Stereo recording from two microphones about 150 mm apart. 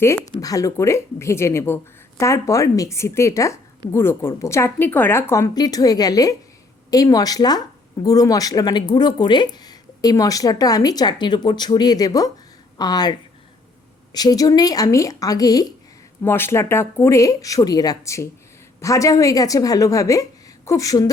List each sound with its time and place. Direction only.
0.0 s speech: 15° left (ahead or behind)